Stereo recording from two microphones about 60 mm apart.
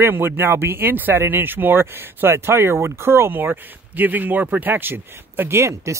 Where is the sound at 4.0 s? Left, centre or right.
Right.